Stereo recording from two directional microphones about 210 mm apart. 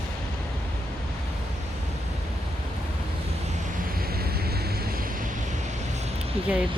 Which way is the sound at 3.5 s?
45° right (ahead or behind).